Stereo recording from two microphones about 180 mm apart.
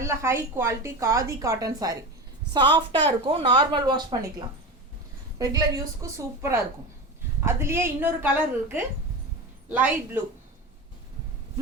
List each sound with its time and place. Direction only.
0.0 s a woman's voice: 15° right (ahead or behind)